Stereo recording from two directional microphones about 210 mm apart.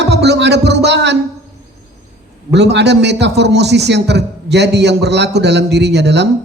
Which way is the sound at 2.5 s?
55° right (ahead or behind).